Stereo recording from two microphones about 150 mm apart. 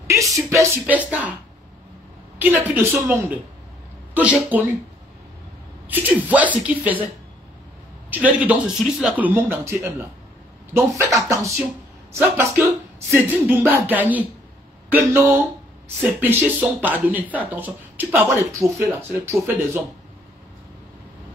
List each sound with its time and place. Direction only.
0.0 s a sound: 20° right (ahead or behind)
0.5 s speech: 15° right (ahead or behind)
2.3 s speech: 10° right (ahead or behind)
5.9 s speech: 10° right (ahead or behind)
8.1 s speech: 10° right (ahead or behind)